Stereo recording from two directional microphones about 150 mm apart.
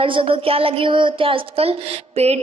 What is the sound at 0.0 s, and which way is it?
A woman's voice, 35° right (ahead or behind).